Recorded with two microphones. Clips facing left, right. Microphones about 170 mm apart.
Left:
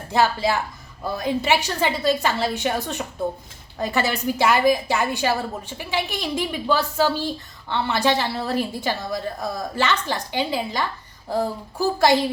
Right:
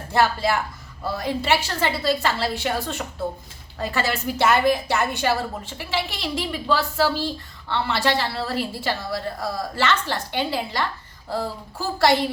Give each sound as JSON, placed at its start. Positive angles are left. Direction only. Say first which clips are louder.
{"t": 0.1, "sound": "speech", "louder": "even", "side_deg": 15}